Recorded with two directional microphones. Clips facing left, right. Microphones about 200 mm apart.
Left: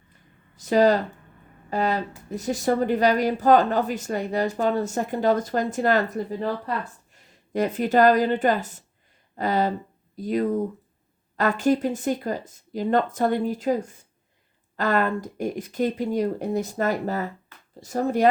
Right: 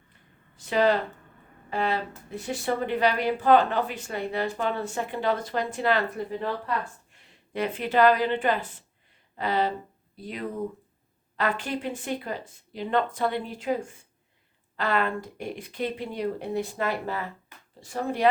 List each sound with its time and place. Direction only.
0.5 s a woman's voice: 40° left (ahead or behind)